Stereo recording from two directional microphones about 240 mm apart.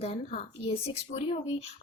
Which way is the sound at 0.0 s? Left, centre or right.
Left.